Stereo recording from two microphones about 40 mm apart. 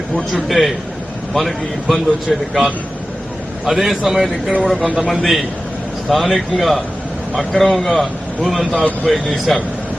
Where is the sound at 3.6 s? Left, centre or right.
Centre.